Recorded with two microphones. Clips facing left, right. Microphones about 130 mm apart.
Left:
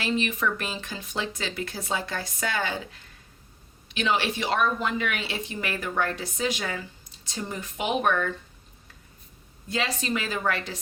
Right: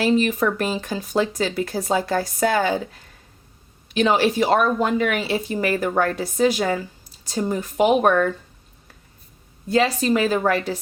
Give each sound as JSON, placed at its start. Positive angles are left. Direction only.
{"t": 0.0, "sound": "speech", "side_deg": -40}
{"t": 9.6, "sound": "speech", "side_deg": -40}